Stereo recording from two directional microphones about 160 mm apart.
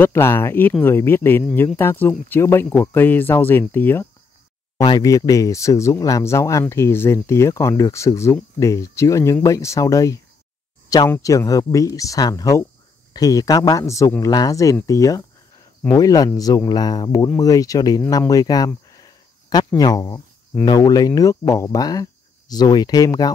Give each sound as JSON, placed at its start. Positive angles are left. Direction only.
{"t": 0.0, "sound": "speech", "side_deg": 15}
{"t": 4.7, "sound": "speech", "side_deg": 25}
{"t": 18.1, "sound": "a sound", "side_deg": 25}
{"t": 19.8, "sound": "speech", "side_deg": 25}